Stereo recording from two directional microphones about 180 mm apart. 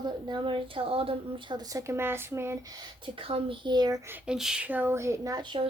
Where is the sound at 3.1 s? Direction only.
30° right (ahead or behind).